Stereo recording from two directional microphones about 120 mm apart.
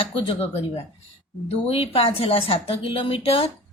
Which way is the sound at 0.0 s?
50° left (ahead or behind).